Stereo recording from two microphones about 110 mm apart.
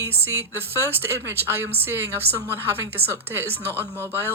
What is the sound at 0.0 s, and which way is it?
A woman's voice, 25° right (ahead or behind).